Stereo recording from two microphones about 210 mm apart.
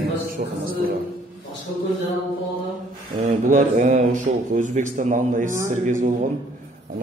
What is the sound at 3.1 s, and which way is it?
Speech, 35° right (ahead or behind).